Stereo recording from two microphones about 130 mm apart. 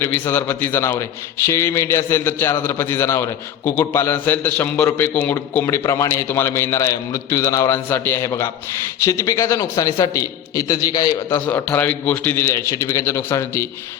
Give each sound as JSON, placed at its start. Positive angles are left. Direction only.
{"t": 0.0, "sound": "a man's voice", "side_deg": 15}
{"t": 11.4, "sound": "a man's voice", "side_deg": 15}